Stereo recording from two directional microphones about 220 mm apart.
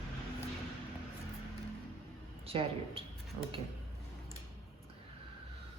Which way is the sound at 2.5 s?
25° right (ahead or behind).